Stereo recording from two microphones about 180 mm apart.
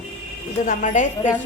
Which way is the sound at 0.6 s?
45° left (ahead or behind).